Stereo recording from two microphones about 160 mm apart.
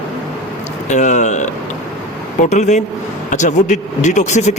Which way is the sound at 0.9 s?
50° left (ahead or behind).